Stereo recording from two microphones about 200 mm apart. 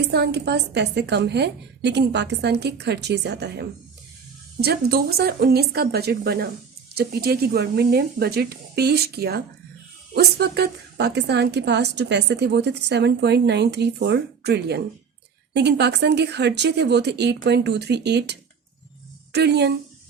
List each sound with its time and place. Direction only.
0.1 s a woman's voice: 55° right (ahead or behind)